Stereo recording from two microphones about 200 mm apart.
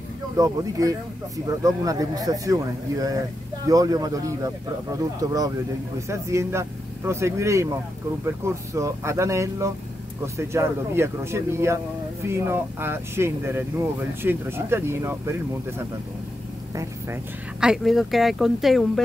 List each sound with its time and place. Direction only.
0.4 s speech: 15° right (ahead or behind)
16.7 s speech: 10° right (ahead or behind)